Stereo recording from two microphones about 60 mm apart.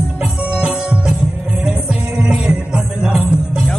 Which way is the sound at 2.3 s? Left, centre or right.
Centre.